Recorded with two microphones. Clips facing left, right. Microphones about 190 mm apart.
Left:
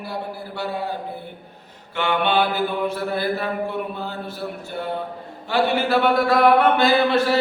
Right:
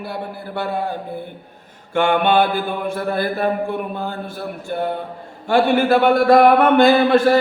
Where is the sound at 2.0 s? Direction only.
50° right (ahead or behind).